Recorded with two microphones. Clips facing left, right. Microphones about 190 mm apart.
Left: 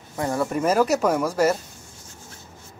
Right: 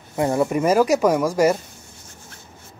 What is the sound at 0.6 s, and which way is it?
Speech, 10° right (ahead or behind).